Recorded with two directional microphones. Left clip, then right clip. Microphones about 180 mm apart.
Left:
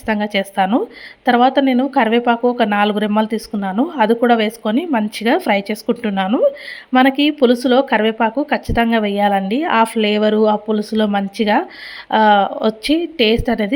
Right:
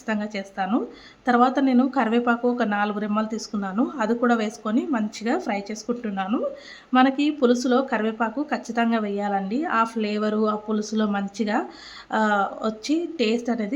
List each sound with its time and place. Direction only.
0.0 s speech: 30° left (ahead or behind)
1.2 s a woman's voice: 20° left (ahead or behind)